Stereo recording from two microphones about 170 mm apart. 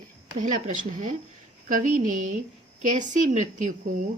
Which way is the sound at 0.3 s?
50° right (ahead or behind).